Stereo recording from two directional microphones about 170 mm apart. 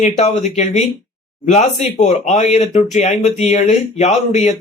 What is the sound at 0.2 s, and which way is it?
Speech, 40° left (ahead or behind).